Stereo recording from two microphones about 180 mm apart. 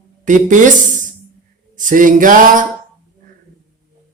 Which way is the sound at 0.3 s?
45° right (ahead or behind).